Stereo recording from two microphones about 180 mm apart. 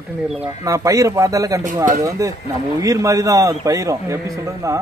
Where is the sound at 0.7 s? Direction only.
15° right (ahead or behind).